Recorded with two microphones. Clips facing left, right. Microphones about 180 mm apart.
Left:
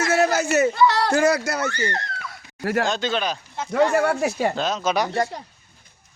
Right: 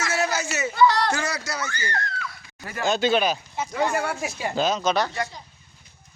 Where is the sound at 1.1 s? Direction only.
55° left (ahead or behind).